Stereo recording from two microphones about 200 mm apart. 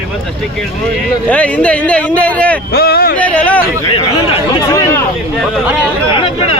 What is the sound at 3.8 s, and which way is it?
Speech, 30° left (ahead or behind).